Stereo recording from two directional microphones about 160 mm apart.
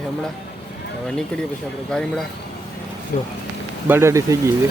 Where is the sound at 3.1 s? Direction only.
60° left (ahead or behind).